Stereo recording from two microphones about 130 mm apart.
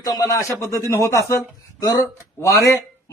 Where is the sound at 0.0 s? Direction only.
25° left (ahead or behind).